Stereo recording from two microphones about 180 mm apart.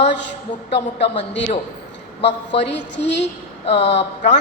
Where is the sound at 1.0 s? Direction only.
75° left (ahead or behind).